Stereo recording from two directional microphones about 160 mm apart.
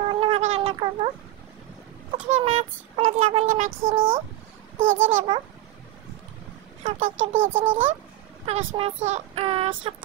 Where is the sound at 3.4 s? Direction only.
55° right (ahead or behind).